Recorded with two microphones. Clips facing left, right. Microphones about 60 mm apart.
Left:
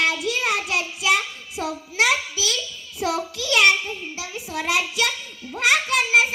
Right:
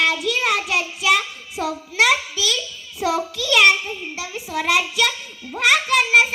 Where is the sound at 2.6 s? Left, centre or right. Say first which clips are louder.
Right 2 dB; centre.